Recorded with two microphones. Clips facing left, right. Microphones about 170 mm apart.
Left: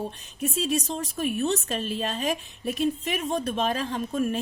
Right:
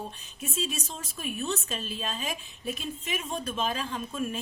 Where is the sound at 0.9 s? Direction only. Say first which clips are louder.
Left 9 dB; 70° left (ahead or behind).